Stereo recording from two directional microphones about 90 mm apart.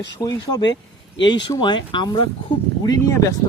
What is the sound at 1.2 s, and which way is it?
Speech, 55° left (ahead or behind).